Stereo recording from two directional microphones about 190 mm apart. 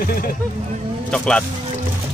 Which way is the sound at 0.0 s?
50° left (ahead or behind).